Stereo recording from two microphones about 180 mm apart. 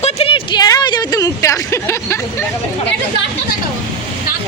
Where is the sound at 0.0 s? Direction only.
30° left (ahead or behind); by 2.1 s 15° left (ahead or behind).